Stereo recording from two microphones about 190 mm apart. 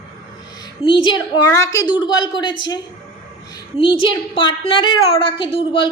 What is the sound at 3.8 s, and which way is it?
A woman's voice, 25° left (ahead or behind).